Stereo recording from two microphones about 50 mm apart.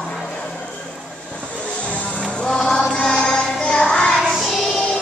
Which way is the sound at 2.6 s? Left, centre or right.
Centre.